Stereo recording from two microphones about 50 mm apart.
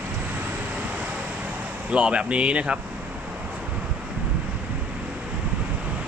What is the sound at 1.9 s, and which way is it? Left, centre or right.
Speech, right.